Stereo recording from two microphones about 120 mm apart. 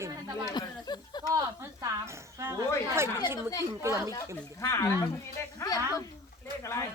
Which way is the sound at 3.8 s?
25° right (ahead or behind).